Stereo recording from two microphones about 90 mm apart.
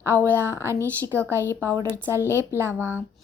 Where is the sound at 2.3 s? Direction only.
25° right (ahead or behind).